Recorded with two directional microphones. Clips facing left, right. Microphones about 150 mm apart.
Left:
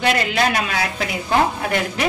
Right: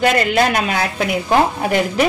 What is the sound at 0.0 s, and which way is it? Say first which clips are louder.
A woman's voice: right 4 dB; 50° right (ahead or behind).